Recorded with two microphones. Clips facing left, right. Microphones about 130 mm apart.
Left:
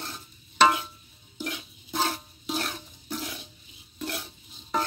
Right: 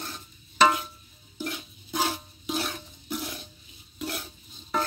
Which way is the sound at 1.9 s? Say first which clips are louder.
Even; 10° right (ahead or behind).